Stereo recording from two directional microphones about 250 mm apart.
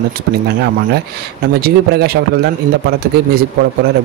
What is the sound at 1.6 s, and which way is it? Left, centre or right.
A man's voice, right.